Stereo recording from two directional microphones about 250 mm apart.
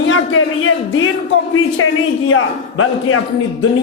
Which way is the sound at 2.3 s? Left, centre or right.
Left.